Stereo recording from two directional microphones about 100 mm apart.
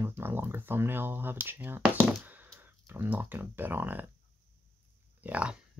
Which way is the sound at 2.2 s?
20° right (ahead or behind).